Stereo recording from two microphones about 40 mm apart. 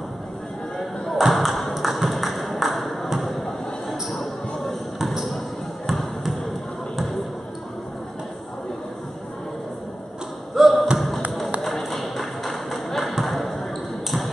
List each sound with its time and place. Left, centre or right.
1.1 s a sound: centre
4.9 s basketball bounce: centre
5.9 s basketball bounce: centre
10.5 s basketball bounce: centre
11.0 s a sound: centre
13.2 s basketball bounce: centre